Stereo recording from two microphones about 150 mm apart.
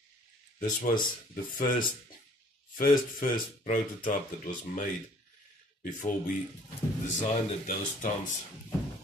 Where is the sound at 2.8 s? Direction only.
65° left (ahead or behind).